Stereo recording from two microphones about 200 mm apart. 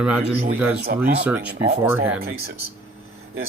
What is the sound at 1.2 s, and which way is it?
Speech, 5° right (ahead or behind).